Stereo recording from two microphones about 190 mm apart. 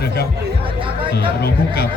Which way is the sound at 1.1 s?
55° left (ahead or behind).